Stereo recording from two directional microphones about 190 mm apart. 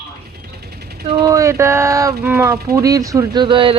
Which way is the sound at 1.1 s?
15° right (ahead or behind).